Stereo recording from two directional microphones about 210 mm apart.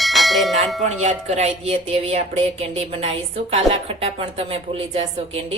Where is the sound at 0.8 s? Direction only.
35° right (ahead or behind).